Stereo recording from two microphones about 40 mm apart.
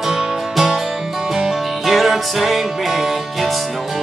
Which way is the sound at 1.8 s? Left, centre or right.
Centre.